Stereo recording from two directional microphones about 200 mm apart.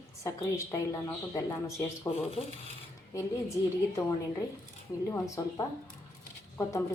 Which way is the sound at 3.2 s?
15° left (ahead or behind).